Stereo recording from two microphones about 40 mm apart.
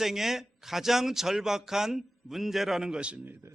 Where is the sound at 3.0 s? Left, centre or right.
Right.